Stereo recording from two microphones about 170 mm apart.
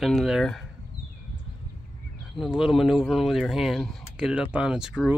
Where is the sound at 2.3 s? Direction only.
Centre (ahead or behind).